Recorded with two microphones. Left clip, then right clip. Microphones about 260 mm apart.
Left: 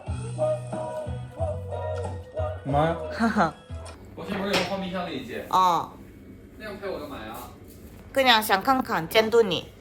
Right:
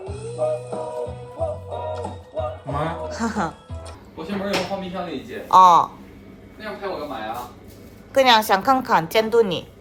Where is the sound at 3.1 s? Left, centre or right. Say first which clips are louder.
Left 1 dB; centre.